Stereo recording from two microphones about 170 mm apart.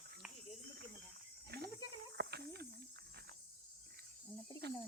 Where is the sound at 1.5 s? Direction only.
70° right (ahead or behind).